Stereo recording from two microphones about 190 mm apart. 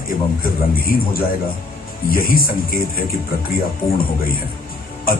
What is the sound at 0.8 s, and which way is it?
Speech, 50° left (ahead or behind).